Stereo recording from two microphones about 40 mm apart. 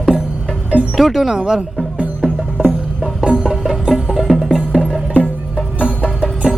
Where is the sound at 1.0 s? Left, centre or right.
Centre.